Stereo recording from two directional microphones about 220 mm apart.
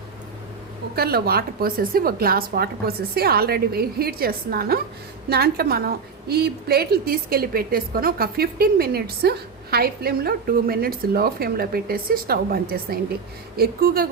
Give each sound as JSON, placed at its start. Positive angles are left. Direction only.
{"t": 0.9, "sound": "a woman's voice", "side_deg": -45}